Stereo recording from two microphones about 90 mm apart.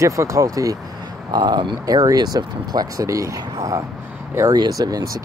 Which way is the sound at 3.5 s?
40° right (ahead or behind).